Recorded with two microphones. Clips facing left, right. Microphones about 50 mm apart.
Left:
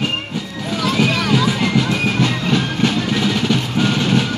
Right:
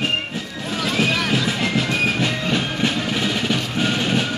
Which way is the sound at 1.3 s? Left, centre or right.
Centre.